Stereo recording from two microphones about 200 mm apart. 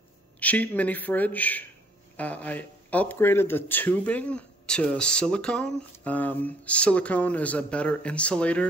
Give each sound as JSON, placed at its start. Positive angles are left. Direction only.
{"t": 0.4, "sound": "speech", "side_deg": 5}